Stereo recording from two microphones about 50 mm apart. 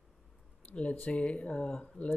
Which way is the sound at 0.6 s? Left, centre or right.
Left.